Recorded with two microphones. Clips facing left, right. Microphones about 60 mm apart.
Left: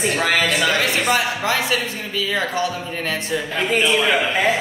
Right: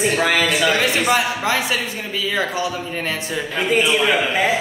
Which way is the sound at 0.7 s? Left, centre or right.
Right.